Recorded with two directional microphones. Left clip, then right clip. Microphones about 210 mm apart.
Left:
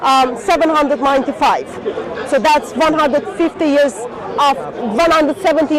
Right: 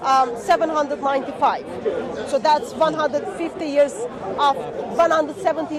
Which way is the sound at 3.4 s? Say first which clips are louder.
Left 11 dB; 40° left (ahead or behind).